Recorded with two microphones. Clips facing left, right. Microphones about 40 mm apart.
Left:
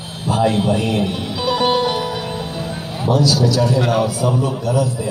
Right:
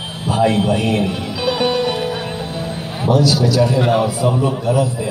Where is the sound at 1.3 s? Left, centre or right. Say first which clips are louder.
Left 1 dB; right.